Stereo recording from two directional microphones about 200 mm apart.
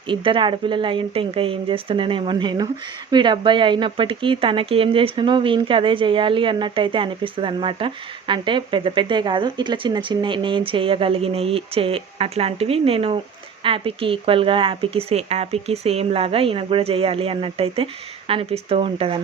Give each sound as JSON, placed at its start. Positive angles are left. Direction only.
{"t": 0.1, "sound": "speech", "side_deg": -25}